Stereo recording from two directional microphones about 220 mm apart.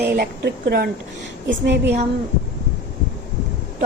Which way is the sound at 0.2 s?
50° right (ahead or behind).